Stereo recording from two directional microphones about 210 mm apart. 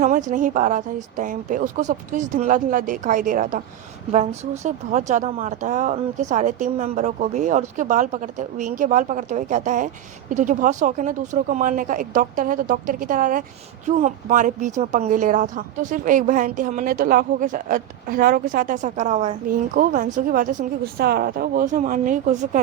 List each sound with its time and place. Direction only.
0.0 s speech: 35° right (ahead or behind)